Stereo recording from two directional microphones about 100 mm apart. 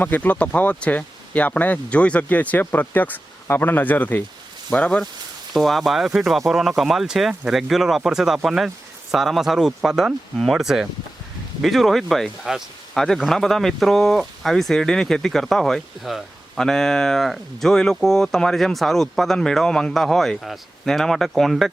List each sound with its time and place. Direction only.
0.0 s speech: 15° left (ahead or behind)